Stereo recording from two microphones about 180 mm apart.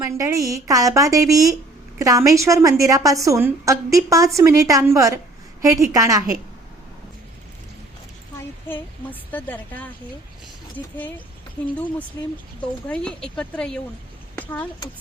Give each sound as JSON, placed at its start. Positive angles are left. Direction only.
{"t": 0.0, "sound": "a woman's voice", "side_deg": -15}
{"t": 8.6, "sound": "a woman's voice", "side_deg": 10}
{"t": 11.6, "sound": "a woman's voice", "side_deg": 10}